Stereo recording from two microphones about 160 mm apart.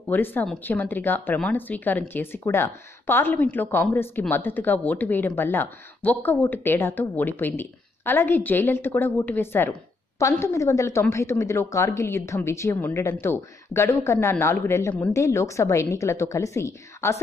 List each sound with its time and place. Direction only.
0.1 s speech: 10° left (ahead or behind)